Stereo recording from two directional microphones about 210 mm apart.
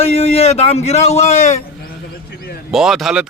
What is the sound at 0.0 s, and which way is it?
A man's voice, 30° left (ahead or behind).